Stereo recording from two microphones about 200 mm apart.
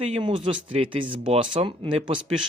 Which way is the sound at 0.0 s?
25° right (ahead or behind).